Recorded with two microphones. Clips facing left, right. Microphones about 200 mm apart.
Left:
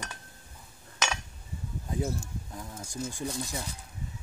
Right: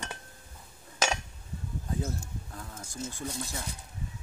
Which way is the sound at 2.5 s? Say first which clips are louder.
Left 2 dB; 15° left (ahead or behind).